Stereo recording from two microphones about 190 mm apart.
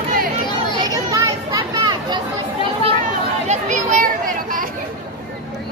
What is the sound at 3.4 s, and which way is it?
Chatter, 40° right (ahead or behind).